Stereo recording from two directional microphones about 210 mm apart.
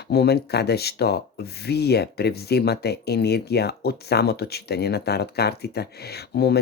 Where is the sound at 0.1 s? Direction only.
50° left (ahead or behind).